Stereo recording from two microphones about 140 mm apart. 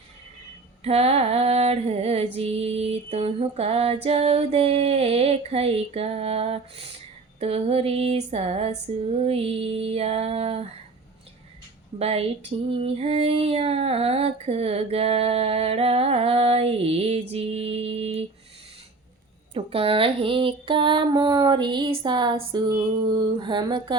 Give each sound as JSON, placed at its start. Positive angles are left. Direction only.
{"t": 0.9, "sound": "child singing", "side_deg": -45}
{"t": 11.9, "sound": "child singing", "side_deg": -45}
{"t": 19.5, "sound": "a sound", "side_deg": -40}